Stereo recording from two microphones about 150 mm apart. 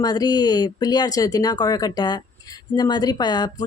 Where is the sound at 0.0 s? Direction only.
25° left (ahead or behind).